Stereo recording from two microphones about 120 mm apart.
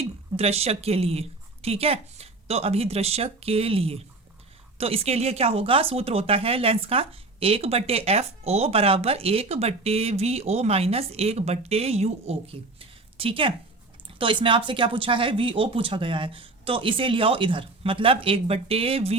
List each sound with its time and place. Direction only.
0.0 s speech: 60° right (ahead or behind)